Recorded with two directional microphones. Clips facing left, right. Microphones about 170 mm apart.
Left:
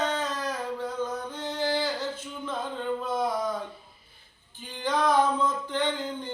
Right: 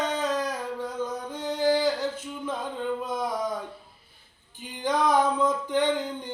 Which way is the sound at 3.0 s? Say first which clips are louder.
Left 1 dB; 15° right (ahead or behind).